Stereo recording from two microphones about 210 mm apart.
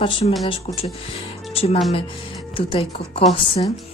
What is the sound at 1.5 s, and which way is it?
Music, 30° left (ahead or behind).